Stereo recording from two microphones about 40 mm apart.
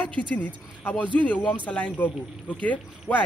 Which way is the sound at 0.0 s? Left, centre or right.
Left.